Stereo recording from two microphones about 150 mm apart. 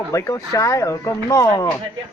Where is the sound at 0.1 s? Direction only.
20° left (ahead or behind).